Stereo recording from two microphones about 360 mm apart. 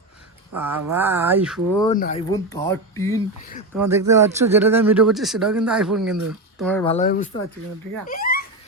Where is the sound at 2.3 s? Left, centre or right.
Centre.